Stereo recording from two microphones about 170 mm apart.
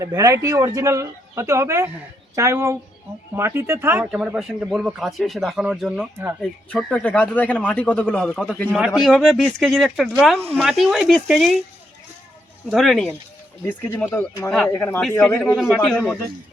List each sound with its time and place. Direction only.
0.0 s speech: 20° right (ahead or behind); by 11.5 s centre (ahead or behind)
12.6 s speech: centre (ahead or behind)
13.7 s speech: 10° left (ahead or behind)
15.5 s speech: centre (ahead or behind)